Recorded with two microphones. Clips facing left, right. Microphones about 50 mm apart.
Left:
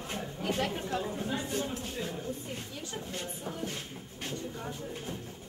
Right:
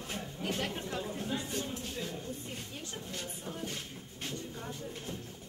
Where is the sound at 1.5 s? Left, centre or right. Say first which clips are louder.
Left 4 dB; left.